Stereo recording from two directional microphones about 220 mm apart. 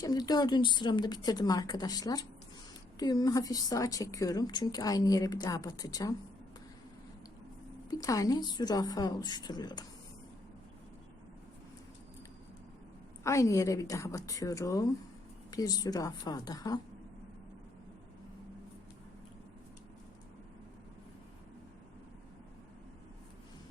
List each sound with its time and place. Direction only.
0.0 s a woman's voice: 15° left (ahead or behind)
7.9 s a woman's voice: 15° left (ahead or behind)
13.2 s a woman's voice: 15° left (ahead or behind)